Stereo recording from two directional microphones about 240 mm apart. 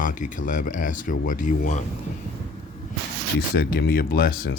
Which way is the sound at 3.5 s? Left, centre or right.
Left.